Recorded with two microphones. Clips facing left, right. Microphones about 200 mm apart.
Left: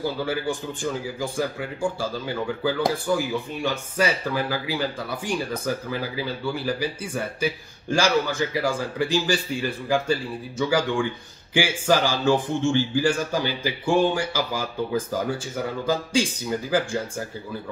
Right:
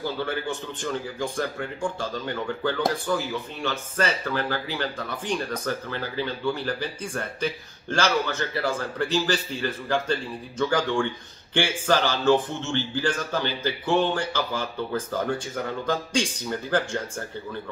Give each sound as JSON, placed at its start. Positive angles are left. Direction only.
{"t": 0.0, "sound": "speech", "side_deg": 10}